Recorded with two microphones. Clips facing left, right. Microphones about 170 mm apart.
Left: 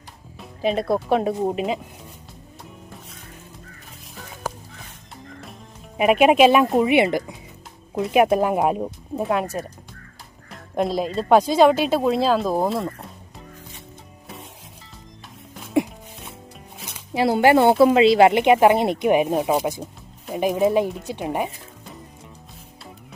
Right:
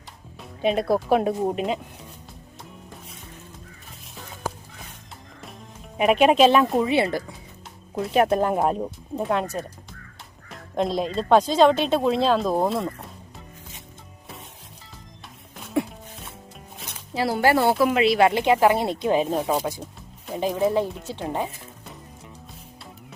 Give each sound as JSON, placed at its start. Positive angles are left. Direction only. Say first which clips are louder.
{"t": 0.3, "sound": "speech", "louder": "even", "side_deg": 0}
{"t": 6.0, "sound": "speech", "louder": "left 2 dB", "side_deg": 5}
{"t": 10.5, "sound": "speech", "louder": "left 2 dB", "side_deg": 5}
{"t": 15.6, "sound": "music", "louder": "left 4 dB", "side_deg": 15}
{"t": 17.2, "sound": "a woman's voice", "louder": "left 4 dB", "side_deg": 20}